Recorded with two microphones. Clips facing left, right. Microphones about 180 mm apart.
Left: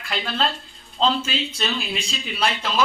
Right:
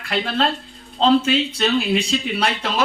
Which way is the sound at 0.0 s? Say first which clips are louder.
Right 4 dB; 60° right (ahead or behind).